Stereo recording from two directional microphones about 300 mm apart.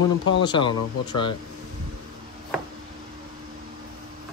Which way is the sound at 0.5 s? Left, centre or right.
Centre.